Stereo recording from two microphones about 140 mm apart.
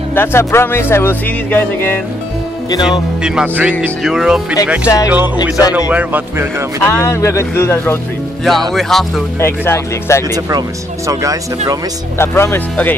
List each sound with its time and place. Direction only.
0.1 s speech: 15° left (ahead or behind)
2.9 s music: 5° right (ahead or behind)
4.8 s speech: 25° left (ahead or behind)
5.9 s a man's voice: 10° right (ahead or behind)
6.8 s speech: 20° left (ahead or behind)
8.7 s music: centre (ahead or behind)
9.4 s speech: 20° left (ahead or behind)
11.1 s speech: 25° right (ahead or behind)
12.2 s speech: 20° left (ahead or behind)